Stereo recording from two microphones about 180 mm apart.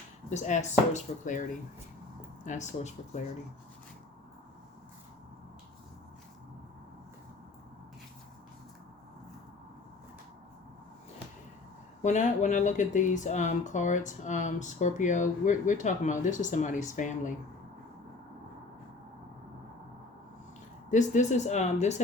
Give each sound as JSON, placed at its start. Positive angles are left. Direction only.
{"t": 0.3, "sound": "speech", "side_deg": 40}
{"t": 12.0, "sound": "speech", "side_deg": 40}
{"t": 20.9, "sound": "speech", "side_deg": 45}